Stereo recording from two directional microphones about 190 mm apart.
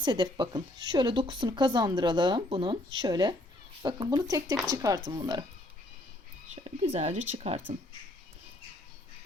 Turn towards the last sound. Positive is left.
turn(degrees=-35)  # may be behind; listen again after turning